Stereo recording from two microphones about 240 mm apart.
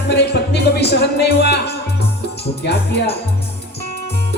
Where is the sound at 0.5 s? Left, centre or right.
Left.